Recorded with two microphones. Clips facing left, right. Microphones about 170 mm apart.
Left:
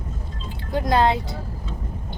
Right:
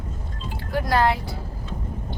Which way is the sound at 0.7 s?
20° left (ahead or behind).